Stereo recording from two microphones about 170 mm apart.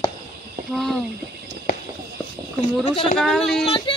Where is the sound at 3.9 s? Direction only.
30° left (ahead or behind).